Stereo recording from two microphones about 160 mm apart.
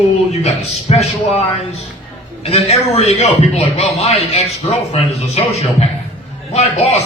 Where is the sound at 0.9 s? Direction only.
40° left (ahead or behind).